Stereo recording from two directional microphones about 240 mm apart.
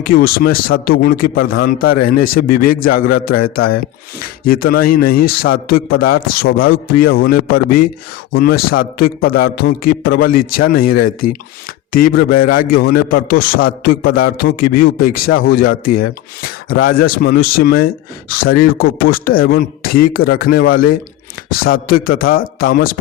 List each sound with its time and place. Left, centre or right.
0.0 s speech: left
10.4 s speech: left
10.7 s speech: left